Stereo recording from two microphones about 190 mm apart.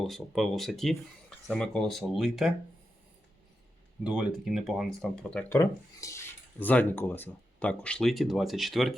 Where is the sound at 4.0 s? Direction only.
5° right (ahead or behind).